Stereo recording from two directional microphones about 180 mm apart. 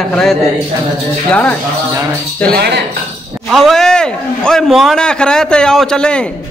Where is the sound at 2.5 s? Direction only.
65° right (ahead or behind).